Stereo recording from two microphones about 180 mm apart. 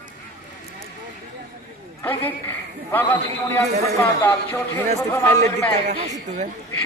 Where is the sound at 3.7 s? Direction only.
40° right (ahead or behind).